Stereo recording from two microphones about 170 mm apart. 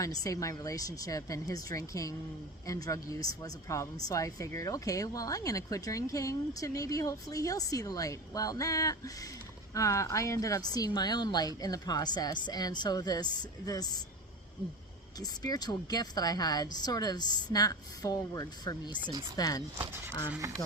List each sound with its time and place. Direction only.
0.0 s speech: 20° left (ahead or behind)
15.2 s speech: 25° left (ahead or behind)